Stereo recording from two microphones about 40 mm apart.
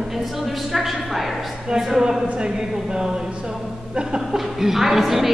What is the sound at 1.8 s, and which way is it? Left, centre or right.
Speech, centre.